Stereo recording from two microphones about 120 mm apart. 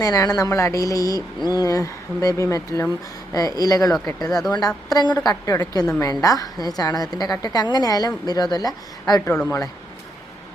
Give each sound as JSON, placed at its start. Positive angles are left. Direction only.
{"t": 0.0, "sound": "a woman's voice", "side_deg": 30}